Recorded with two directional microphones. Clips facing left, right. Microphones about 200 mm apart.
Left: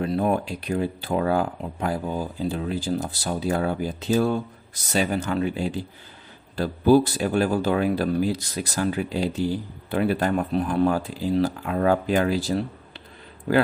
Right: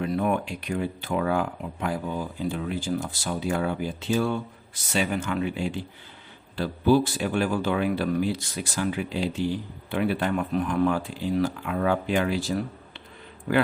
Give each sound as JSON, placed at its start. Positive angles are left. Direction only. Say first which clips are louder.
{"t": 0.0, "sound": "speech", "louder": "left 2 dB", "side_deg": 35}